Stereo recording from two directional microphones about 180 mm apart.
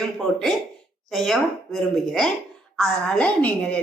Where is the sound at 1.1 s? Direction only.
Centre (ahead or behind).